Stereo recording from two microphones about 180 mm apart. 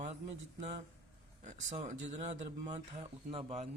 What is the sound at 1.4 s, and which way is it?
Speech, 40° right (ahead or behind).